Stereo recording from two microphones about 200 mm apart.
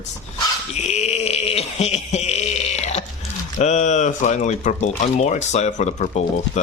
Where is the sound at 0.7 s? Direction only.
35° left (ahead or behind).